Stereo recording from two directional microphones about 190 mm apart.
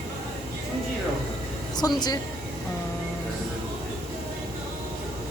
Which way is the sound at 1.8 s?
15° left (ahead or behind).